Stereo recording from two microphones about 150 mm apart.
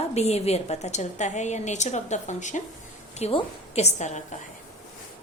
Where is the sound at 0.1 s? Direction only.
45° left (ahead or behind).